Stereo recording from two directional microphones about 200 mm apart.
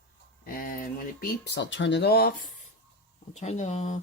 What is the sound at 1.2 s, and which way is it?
Speech, 60° left (ahead or behind).